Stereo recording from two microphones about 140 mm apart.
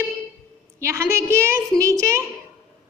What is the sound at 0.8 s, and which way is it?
A woman's voice, 20° right (ahead or behind).